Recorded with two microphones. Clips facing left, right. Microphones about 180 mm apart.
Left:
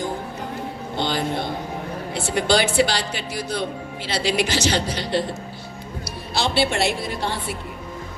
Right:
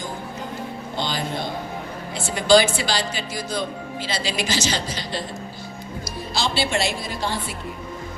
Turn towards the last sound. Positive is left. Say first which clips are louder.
# left 1 dB
turn(degrees=60)  # may be behind; listen again after turning